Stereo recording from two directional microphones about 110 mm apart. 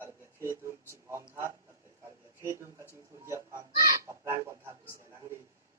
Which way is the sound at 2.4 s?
25° right (ahead or behind).